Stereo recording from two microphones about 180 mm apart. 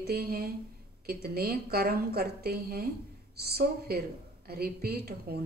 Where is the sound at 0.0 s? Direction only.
60° right (ahead or behind).